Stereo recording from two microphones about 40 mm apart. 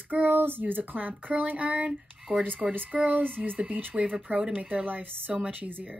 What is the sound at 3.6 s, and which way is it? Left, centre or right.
Speech, right.